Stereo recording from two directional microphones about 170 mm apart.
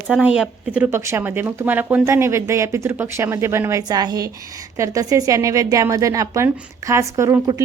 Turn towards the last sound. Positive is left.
turn(degrees=-15)  # may be behind; listen again after turning